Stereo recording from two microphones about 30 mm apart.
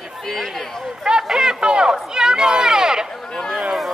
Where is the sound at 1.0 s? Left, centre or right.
Right.